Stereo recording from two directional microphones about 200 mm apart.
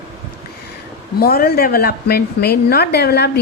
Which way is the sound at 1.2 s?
50° left (ahead or behind).